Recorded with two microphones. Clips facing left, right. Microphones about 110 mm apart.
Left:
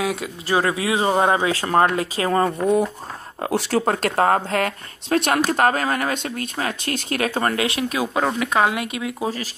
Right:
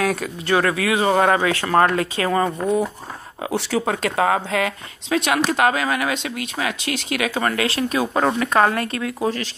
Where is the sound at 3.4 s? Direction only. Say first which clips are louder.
Left 1 dB; 50° left (ahead or behind).